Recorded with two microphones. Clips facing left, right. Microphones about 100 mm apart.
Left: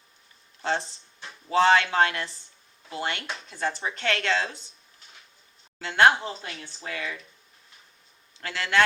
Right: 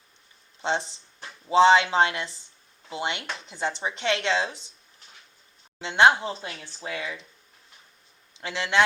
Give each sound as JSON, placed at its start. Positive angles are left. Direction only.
{"t": 0.6, "sound": "speech", "side_deg": -20}
{"t": 5.8, "sound": "speech", "side_deg": -20}
{"t": 8.4, "sound": "speech", "side_deg": -20}